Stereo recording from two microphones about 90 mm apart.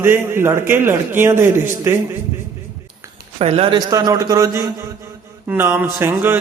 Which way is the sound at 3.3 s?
90° right.